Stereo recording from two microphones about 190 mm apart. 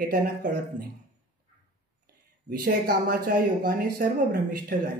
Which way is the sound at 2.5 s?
50° right (ahead or behind).